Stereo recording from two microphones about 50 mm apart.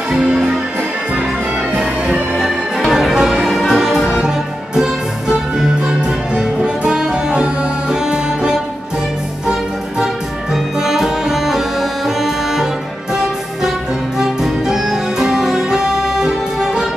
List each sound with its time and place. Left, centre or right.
0.1 s speech: centre
2.9 s music: centre
5.6 s music: centre
10.5 s music: centre
14.1 s music: centre